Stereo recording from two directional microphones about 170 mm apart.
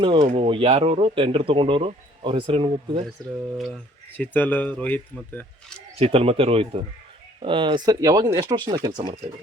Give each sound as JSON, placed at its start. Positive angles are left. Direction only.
{"t": 0.0, "sound": "a man's voice", "side_deg": -30}
{"t": 4.2, "sound": "speech", "side_deg": 10}
{"t": 6.0, "sound": "a man's voice", "side_deg": -35}